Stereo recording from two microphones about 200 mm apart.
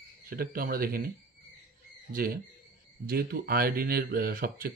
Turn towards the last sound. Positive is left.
turn(degrees=-45)  # may be behind; listen again after turning